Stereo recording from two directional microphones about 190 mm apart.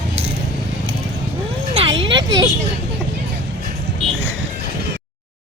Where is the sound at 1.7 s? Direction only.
30° right (ahead or behind).